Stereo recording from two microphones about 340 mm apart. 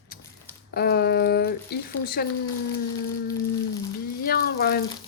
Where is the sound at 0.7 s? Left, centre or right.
Left.